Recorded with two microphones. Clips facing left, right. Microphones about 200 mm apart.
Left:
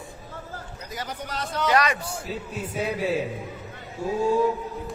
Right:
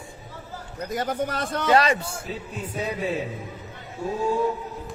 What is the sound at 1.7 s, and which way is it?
Speech, 30° right (ahead or behind).